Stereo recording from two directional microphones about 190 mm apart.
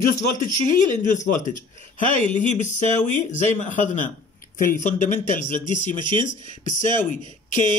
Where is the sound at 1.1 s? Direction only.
40° left (ahead or behind).